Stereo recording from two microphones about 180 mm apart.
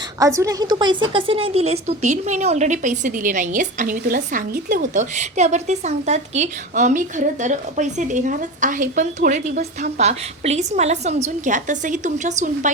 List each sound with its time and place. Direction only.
0.2 s a woman's voice: 15° right (ahead or behind); by 12.7 s 45° right (ahead or behind)